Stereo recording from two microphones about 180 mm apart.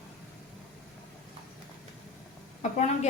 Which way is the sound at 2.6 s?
40° left (ahead or behind).